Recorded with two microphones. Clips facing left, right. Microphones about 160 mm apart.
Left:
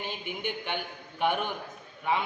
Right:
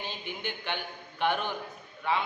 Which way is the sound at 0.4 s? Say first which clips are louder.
Left 2 dB; 10° left (ahead or behind).